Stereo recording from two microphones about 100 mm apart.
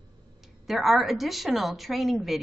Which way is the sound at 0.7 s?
Centre (ahead or behind).